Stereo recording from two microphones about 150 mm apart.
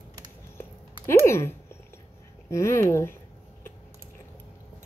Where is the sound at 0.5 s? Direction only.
15° left (ahead or behind).